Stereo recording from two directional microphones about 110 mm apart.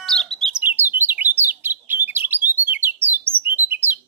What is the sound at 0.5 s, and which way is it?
Bird, 15° right (ahead or behind).